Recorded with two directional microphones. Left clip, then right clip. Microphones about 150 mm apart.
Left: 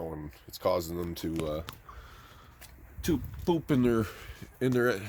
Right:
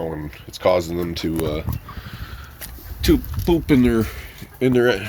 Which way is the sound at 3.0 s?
40° left (ahead or behind).